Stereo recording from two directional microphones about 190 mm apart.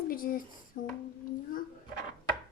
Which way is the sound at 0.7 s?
55° left (ahead or behind).